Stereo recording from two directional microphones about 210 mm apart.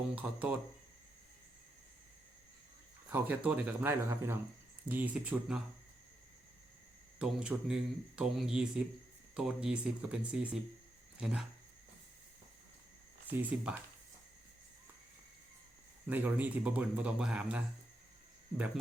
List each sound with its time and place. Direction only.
0.2 s speech: 5° right (ahead or behind)
3.1 s speech: 10° right (ahead or behind)
7.2 s speech: 5° right (ahead or behind)
13.3 s speech: 10° right (ahead or behind)
16.0 s speech: 10° right (ahead or behind)